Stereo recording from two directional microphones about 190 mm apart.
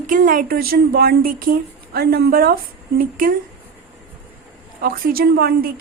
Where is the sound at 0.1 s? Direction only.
45° right (ahead or behind).